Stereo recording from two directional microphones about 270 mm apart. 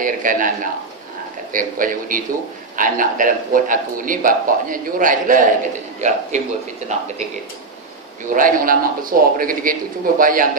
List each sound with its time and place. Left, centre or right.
0.0 s speech: right
1.5 s a man's voice: right
8.3 s a man's voice: right